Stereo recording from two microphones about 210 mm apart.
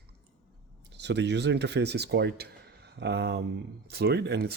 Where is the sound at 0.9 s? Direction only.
55° right (ahead or behind).